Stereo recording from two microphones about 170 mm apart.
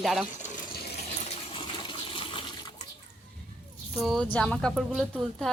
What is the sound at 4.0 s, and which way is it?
Speech, centre (ahead or behind).